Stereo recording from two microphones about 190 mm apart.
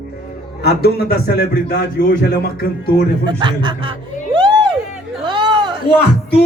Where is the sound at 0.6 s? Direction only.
55° left (ahead or behind).